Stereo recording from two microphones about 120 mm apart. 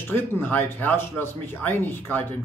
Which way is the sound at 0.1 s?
15° left (ahead or behind).